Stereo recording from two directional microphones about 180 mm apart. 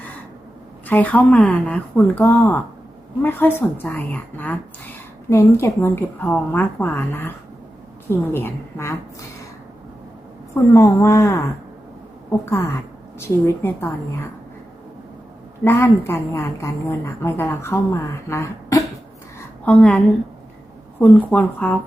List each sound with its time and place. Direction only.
0.9 s a woman's voice: 10° left (ahead or behind)
10.5 s a woman's voice: 15° left (ahead or behind)
15.6 s a woman's voice: 15° left (ahead or behind)
21.0 s a woman's voice: 10° left (ahead or behind)